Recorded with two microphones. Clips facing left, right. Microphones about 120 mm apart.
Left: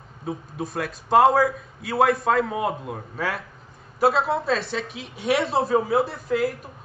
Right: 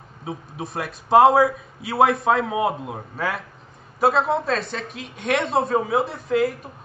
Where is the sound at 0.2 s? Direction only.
Centre (ahead or behind).